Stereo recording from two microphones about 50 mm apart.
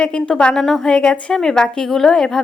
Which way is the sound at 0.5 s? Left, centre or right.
Centre.